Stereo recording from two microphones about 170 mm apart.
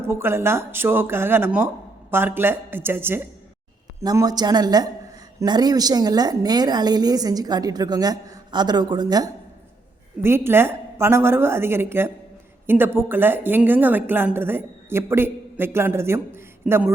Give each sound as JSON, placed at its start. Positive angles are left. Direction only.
{"t": 0.1, "sound": "a woman's voice", "side_deg": -15}